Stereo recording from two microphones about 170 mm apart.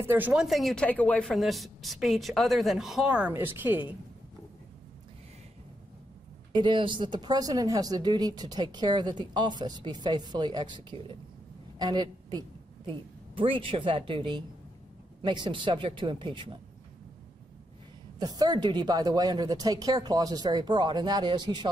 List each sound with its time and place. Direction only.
0.0 s speech: 10° right (ahead or behind)
6.5 s a woman's voice: 30° right (ahead or behind)
18.2 s speech: 25° right (ahead or behind)